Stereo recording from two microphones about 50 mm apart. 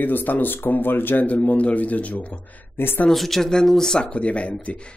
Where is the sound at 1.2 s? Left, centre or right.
Left.